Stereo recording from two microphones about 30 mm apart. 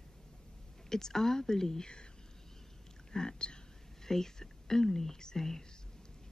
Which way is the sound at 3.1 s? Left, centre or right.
Left.